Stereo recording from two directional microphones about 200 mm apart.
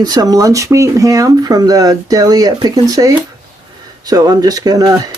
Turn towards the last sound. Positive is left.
turn(degrees=-20)  # may be behind; listen again after turning